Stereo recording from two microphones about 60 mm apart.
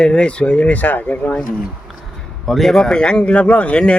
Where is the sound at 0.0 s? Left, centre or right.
Centre.